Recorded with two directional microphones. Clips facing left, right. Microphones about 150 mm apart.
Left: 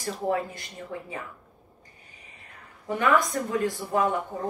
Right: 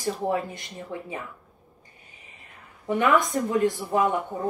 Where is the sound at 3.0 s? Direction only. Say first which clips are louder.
Right 1 dB; 20° right (ahead or behind).